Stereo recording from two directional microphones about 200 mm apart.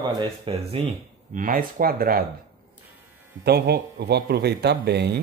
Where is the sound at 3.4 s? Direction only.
55° right (ahead or behind).